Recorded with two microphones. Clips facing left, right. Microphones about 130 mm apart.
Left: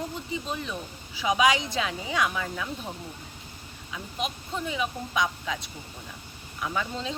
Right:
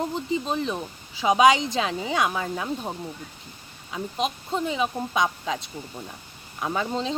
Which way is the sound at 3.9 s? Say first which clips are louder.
Right 5 dB; 25° right (ahead or behind).